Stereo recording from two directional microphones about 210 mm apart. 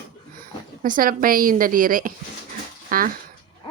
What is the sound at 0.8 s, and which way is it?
A woman's voice, 40° right (ahead or behind).